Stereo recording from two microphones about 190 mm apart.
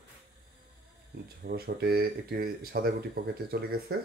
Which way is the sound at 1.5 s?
55° right (ahead or behind).